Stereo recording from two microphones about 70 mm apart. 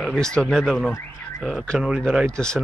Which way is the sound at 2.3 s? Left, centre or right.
Centre.